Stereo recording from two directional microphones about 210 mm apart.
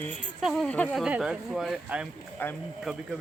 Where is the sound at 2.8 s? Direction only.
5° right (ahead or behind).